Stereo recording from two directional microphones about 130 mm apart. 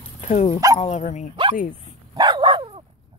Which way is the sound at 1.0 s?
65° left (ahead or behind).